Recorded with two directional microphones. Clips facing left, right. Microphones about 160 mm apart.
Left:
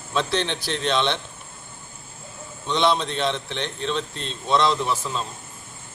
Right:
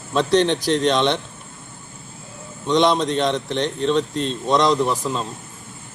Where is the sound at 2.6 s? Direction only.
40° right (ahead or behind).